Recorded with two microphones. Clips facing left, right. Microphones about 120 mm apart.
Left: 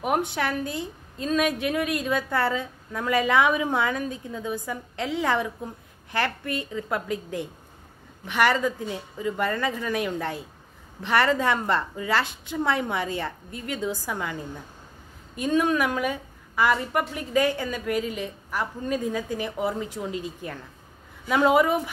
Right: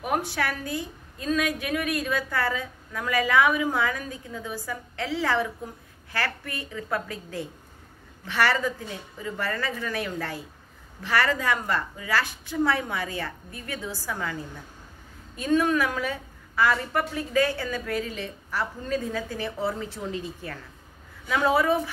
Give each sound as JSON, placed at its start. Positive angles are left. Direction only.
{"t": 0.0, "sound": "a woman's voice", "side_deg": 20}